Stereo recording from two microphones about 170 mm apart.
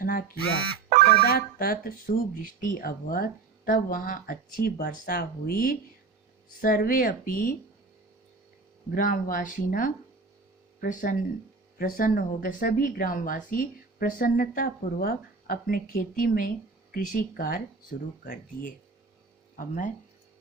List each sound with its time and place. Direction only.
0.0 s a sound: 60° left (ahead or behind)
1.0 s speech: 65° left (ahead or behind)
9.0 s speech: 55° left (ahead or behind)
19.5 s speech: 50° left (ahead or behind)